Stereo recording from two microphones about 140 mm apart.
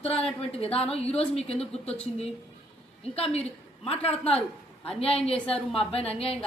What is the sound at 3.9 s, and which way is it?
Speech, 45° left (ahead or behind).